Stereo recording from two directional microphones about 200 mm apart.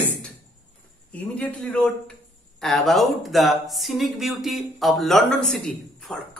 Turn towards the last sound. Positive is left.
turn(degrees=0)  # may be behind; listen again after turning